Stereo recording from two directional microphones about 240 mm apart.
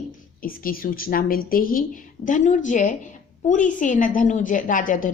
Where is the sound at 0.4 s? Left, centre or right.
Left.